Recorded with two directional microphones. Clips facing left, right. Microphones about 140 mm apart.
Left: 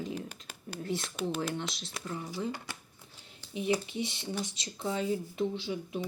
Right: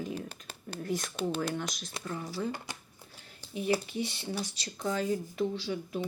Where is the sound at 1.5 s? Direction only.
25° left (ahead or behind).